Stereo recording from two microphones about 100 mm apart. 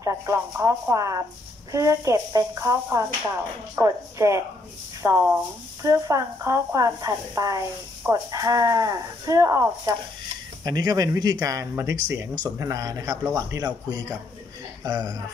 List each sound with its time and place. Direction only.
0.0 s speech: 30° right (ahead or behind)
10.6 s speech: 40° right (ahead or behind)